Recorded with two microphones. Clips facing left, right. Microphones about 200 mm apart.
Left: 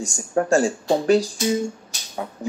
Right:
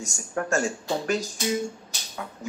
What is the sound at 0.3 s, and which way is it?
Speech, 30° left (ahead or behind).